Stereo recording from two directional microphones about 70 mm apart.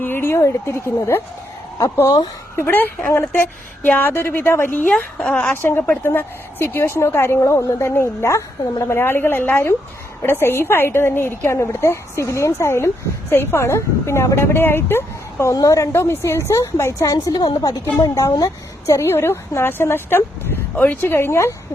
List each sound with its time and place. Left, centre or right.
0.0 s a woman's voice: left
2.6 s speech: left
4.7 s a woman's voice: centre
5.6 s a woman's voice: left
15.5 s a woman's voice: left
15.9 s a woman's voice: left
17.4 s a woman's voice: left